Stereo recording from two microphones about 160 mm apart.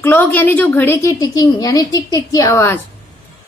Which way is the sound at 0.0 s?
15° left (ahead or behind).